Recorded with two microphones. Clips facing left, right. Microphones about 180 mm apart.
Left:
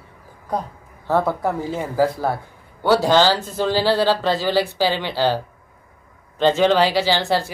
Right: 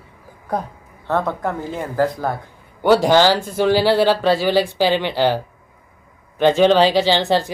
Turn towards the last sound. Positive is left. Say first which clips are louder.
# right 3 dB
turn(degrees=-20)  # may be behind; listen again after turning